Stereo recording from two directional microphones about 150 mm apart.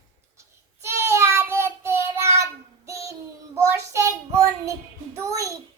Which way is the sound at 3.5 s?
20° right (ahead or behind).